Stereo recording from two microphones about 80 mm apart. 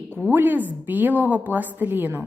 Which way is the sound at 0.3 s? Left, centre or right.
Right.